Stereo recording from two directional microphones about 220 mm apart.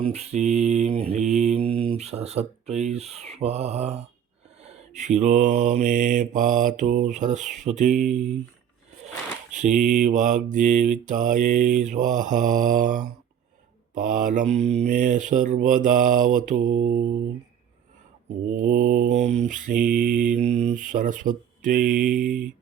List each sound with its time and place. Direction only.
0.0 s mantra: 30° right (ahead or behind)
9.5 s mantra: 35° right (ahead or behind)
18.5 s mantra: 40° right (ahead or behind)